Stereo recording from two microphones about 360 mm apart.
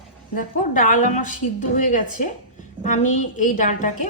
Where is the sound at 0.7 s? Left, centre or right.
Left.